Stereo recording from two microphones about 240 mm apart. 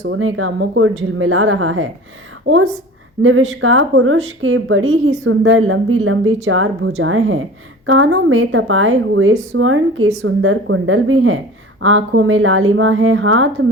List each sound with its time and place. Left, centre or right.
0.1 s a woman's voice: right